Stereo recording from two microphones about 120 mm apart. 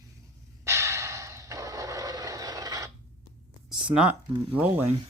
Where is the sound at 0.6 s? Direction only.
25° right (ahead or behind).